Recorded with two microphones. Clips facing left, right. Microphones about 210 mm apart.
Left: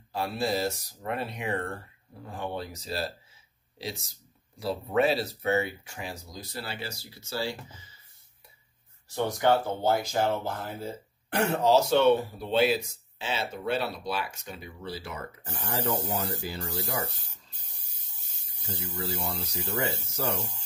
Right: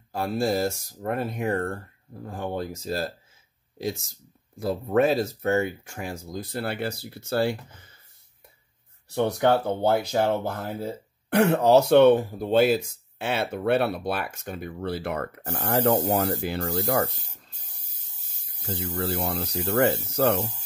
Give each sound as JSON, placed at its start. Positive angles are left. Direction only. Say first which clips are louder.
{"t": 0.1, "sound": "speech", "louder": "right 4 dB", "side_deg": -45}
{"t": 9.1, "sound": "speech", "louder": "right 3 dB", "side_deg": -60}
{"t": 19.0, "sound": "speech", "louder": "right 5 dB", "side_deg": -60}